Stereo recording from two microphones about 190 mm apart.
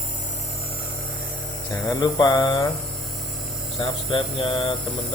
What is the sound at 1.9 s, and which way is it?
Speech, 20° left (ahead or behind).